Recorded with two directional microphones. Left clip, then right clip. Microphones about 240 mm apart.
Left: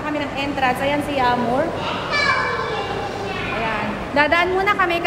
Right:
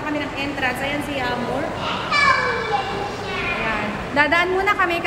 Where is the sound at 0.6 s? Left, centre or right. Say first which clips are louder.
Left 5 dB; centre.